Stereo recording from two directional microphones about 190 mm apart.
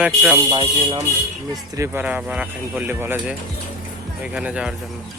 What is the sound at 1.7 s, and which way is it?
Speech, 15° right (ahead or behind).